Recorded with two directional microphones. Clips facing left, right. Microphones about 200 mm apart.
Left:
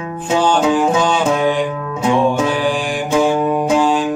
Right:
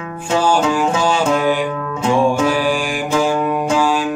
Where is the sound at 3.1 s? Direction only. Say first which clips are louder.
Left 3 dB; 20° left (ahead or behind).